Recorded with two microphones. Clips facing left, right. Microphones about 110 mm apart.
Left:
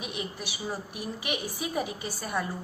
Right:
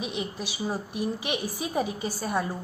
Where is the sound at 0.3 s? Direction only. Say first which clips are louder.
Right 4 dB; 25° right (ahead or behind).